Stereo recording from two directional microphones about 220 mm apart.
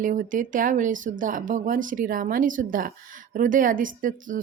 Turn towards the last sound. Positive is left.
turn(degrees=-35)  # may be behind; listen again after turning